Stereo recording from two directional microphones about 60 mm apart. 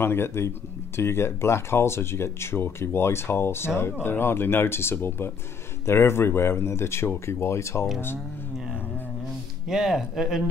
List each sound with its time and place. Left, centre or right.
0.0 s speech: left
9.7 s speech: centre